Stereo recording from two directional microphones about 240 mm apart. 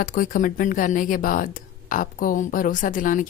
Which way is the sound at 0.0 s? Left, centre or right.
Left.